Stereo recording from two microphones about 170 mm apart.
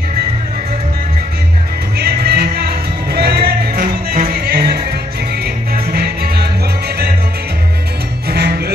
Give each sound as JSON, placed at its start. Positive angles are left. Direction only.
{"t": 2.0, "sound": "music", "side_deg": -70}
{"t": 8.3, "sound": "music", "side_deg": -75}